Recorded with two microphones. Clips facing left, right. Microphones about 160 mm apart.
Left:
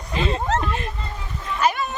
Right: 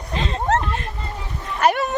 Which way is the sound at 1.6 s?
65° right (ahead or behind).